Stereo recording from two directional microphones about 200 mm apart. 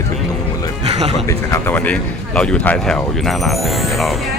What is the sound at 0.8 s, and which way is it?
Speech, 30° right (ahead or behind).